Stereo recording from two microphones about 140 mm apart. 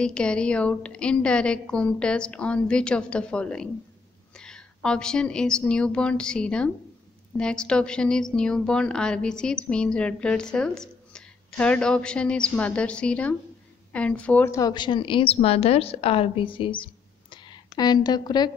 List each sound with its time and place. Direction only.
0.0 s a woman's voice: 5° left (ahead or behind)
14.7 s a woman's voice: 35° left (ahead or behind)